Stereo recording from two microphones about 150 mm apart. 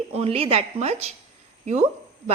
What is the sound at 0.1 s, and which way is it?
A woman's voice, 40° right (ahead or behind).